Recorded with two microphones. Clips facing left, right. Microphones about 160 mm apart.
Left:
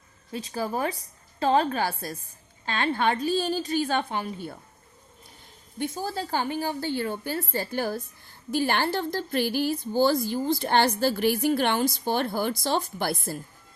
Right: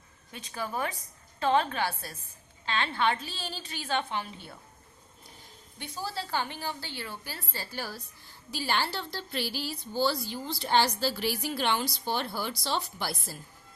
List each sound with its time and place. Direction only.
0.3 s a woman's voice: 35° left (ahead or behind)
5.8 s a woman's voice: 50° left (ahead or behind)